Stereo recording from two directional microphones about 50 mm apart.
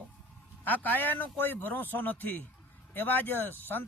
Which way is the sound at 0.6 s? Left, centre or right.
Left.